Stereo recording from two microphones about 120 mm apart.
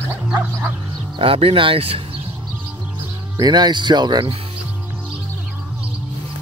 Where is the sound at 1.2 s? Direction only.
50° right (ahead or behind).